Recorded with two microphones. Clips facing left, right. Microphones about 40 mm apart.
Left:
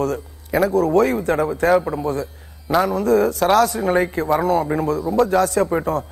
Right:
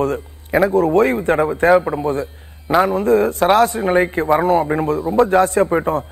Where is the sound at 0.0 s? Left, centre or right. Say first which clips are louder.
Right 3 dB; right.